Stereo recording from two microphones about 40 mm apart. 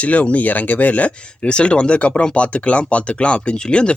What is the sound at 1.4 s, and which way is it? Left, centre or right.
Speech, left.